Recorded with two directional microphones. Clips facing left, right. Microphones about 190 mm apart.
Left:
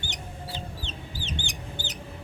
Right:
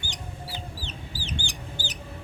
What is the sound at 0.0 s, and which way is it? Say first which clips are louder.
Chicken: even; 20° left (ahead or behind).